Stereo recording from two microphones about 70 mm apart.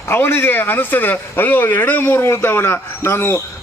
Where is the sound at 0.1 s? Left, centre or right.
Left.